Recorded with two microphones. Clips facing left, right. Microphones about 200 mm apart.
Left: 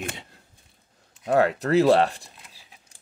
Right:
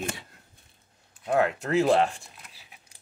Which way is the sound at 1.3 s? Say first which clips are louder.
Left 4 dB; 35° left (ahead or behind).